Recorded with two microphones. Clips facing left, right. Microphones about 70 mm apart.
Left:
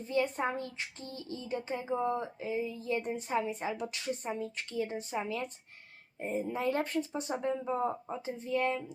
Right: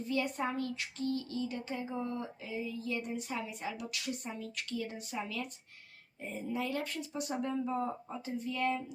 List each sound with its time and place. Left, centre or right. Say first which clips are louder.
0.1 s speech: left 3 dB; left